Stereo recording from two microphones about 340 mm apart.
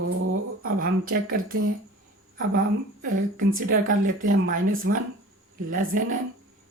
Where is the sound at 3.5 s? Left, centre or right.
Right.